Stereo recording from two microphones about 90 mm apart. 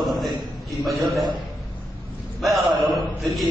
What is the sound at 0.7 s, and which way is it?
Speech, centre (ahead or behind).